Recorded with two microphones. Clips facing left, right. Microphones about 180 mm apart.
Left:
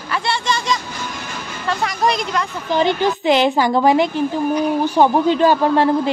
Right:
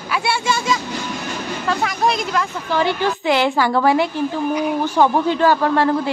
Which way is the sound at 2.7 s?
20° left (ahead or behind).